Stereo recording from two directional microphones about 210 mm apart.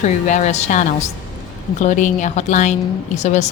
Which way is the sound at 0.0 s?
35° left (ahead or behind).